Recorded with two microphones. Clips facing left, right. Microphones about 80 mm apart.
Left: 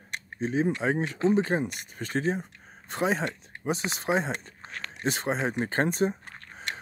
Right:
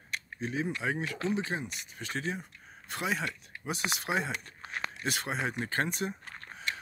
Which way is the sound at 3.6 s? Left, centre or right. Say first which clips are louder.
Left 5 dB; left.